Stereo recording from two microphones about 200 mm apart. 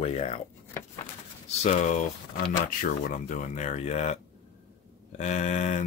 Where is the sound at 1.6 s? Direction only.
35° left (ahead or behind).